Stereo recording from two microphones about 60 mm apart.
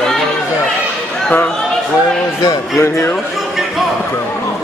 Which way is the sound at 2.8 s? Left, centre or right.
Left.